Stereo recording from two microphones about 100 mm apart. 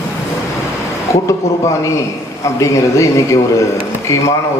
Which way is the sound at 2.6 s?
30° left (ahead or behind).